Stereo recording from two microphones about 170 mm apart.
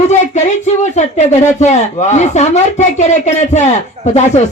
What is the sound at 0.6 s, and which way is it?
Speech, 45° left (ahead or behind).